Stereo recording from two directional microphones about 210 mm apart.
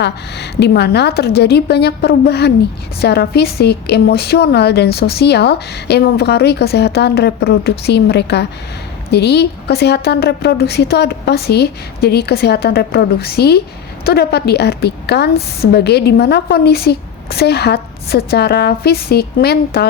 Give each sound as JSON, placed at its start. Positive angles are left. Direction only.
{"t": 0.0, "sound": "a woman's voice", "side_deg": 50}